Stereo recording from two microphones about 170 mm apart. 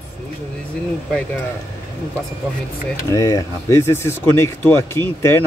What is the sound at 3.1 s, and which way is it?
Speech, 20° left (ahead or behind).